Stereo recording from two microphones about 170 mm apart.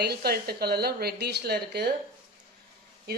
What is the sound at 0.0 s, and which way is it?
Speech, 65° right (ahead or behind).